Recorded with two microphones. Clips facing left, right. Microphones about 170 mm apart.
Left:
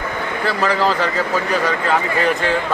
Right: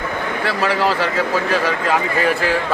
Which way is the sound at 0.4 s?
5° right (ahead or behind).